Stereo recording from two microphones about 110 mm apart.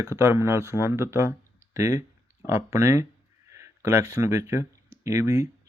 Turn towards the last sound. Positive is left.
turn(degrees=-30)  # may be behind; listen again after turning